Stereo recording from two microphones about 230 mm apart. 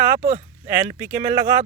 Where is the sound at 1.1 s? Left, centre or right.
Right.